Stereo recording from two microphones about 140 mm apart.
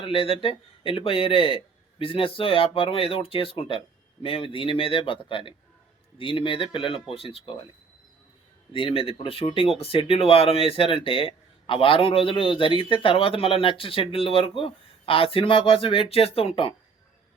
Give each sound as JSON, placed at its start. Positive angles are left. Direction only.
{"t": 0.0, "sound": "speech", "side_deg": 40}
{"t": 8.7, "sound": "speech", "side_deg": 40}